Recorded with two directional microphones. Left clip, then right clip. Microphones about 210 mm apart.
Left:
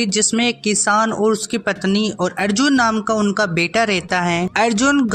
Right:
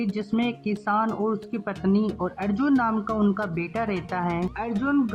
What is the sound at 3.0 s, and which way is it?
Speech, 40° left (ahead or behind).